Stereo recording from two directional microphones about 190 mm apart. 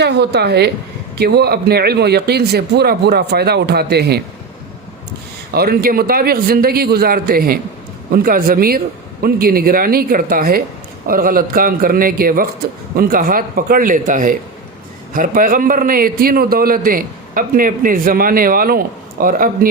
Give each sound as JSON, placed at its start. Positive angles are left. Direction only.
{"t": 0.0, "sound": "speech", "side_deg": -65}
{"t": 5.5, "sound": "a man's voice", "side_deg": -50}